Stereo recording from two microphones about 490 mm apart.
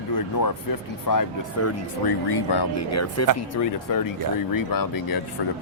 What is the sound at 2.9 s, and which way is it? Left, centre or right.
A man's voice, left.